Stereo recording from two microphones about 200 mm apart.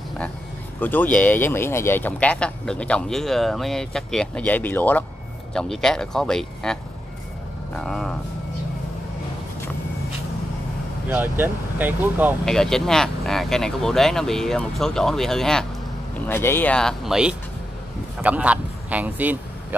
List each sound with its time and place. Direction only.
0.7 s speech: 10° left (ahead or behind)
7.8 s speech: centre (ahead or behind)
11.1 s speech: 10° right (ahead or behind)
12.4 s speech: 5° left (ahead or behind)